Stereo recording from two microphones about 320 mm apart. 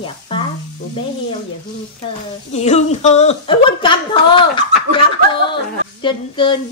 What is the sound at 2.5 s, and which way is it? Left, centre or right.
A woman's voice, left.